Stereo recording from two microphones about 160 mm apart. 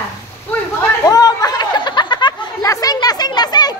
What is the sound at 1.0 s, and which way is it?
Chatter, 25° left (ahead or behind).